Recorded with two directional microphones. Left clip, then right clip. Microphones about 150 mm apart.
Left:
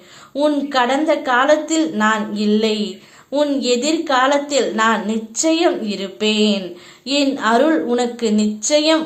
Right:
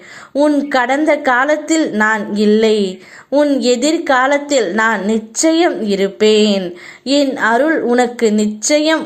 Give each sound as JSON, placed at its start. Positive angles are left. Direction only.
{"t": 0.3, "sound": "a woman's voice", "side_deg": -30}
{"t": 0.7, "sound": "a woman's voice", "side_deg": -40}
{"t": 2.0, "sound": "a sound", "side_deg": -40}
{"t": 3.3, "sound": "a woman's voice", "side_deg": -25}
{"t": 3.6, "sound": "a woman's voice", "side_deg": -40}